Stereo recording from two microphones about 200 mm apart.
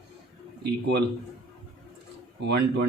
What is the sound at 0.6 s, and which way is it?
Speech, 55° right (ahead or behind).